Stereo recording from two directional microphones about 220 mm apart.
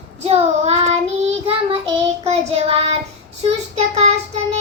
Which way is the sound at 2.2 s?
30° right (ahead or behind).